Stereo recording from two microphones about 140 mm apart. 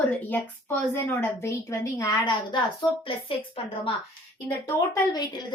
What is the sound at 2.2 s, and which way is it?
A woman's voice, 30° left (ahead or behind).